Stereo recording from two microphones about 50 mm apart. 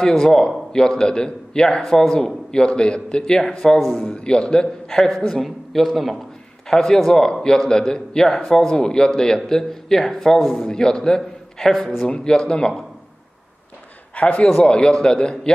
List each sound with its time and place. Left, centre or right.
0.0 s a man's voice: centre
3.7 s a man's voice: centre
4.2 s a man's voice: centre
10.4 s a man's voice: centre
10.7 s a man's voice: centre
14.1 s a man's voice: left